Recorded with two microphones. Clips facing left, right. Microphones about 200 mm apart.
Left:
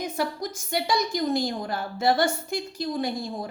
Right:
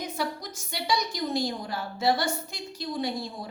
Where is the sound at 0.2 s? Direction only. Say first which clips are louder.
Left 4 dB; 50° left (ahead or behind).